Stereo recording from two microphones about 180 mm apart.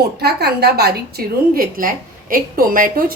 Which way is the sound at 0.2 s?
65° right (ahead or behind).